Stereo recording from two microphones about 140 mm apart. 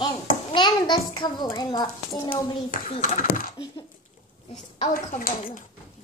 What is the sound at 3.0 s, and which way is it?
Speech, 60° left (ahead or behind).